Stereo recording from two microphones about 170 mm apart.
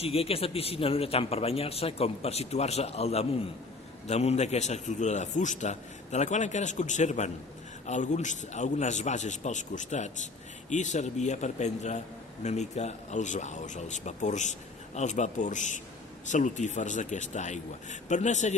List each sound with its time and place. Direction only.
0.0 s a man's voice: 35° left (ahead or behind)